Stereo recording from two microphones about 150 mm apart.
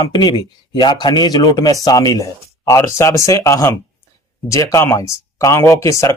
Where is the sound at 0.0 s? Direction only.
25° left (ahead or behind).